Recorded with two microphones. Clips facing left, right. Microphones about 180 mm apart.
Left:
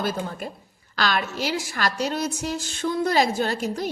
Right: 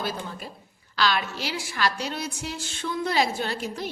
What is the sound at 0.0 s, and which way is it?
A woman's voice, 50° left (ahead or behind).